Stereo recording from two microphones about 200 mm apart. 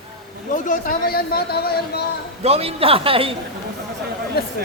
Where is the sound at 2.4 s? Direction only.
30° right (ahead or behind).